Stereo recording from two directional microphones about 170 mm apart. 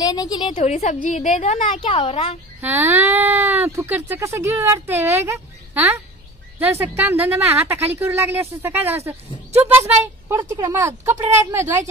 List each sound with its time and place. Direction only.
0.0 s a woman's voice: 20° left (ahead or behind)
0.6 s a woman's voice: 45° left (ahead or behind)
1.8 s a woman's voice: 30° left (ahead or behind)
2.6 s speech: 15° right (ahead or behind)
10.2 s speech: 15° right (ahead or behind)